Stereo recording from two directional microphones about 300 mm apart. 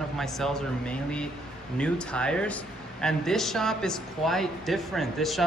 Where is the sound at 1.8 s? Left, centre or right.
Centre.